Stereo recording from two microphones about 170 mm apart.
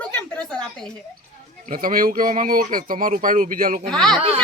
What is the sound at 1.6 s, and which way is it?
Speech, 55° right (ahead or behind).